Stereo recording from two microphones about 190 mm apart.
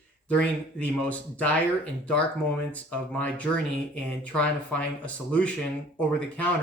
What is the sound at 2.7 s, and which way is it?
Speech, 5° left (ahead or behind).